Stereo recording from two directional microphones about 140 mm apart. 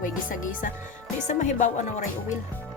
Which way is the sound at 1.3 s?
60° left (ahead or behind).